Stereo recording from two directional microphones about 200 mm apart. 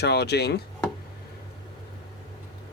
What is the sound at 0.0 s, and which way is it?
Speech, 55° left (ahead or behind).